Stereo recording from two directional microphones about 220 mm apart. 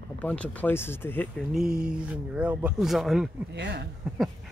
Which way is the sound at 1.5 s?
Centre (ahead or behind).